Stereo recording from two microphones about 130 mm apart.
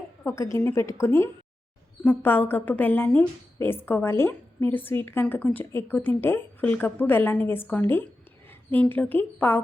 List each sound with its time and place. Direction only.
0.3 s a woman's voice: 25° left (ahead or behind)